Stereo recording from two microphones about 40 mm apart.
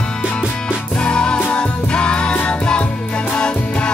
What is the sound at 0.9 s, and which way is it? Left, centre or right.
Music, left.